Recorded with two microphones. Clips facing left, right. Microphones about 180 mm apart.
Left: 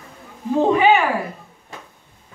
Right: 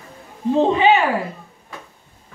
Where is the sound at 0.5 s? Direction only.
25° right (ahead or behind).